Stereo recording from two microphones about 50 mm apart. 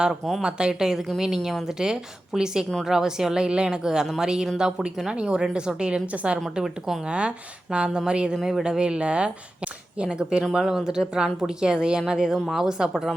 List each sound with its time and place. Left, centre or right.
0.4 s a woman's voice: centre
6.6 s a woman's voice: centre
8.4 s speech: centre
8.6 s a woman's voice: centre
10.5 s speech: centre